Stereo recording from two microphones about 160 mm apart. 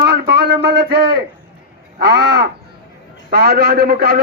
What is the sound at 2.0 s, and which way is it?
Crow, 90° right.